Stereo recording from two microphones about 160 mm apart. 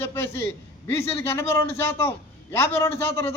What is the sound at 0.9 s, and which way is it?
A man's voice, 15° left (ahead or behind).